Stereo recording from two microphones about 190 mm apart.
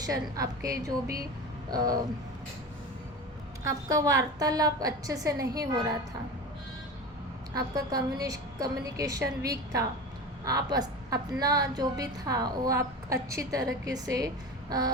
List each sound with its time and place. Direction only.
0.0 s a woman's voice: 20° right (ahead or behind)
1.7 s a woman's voice: 20° right (ahead or behind)
3.6 s a woman's voice: 15° right (ahead or behind)
7.5 s a woman's voice: 20° right (ahead or behind)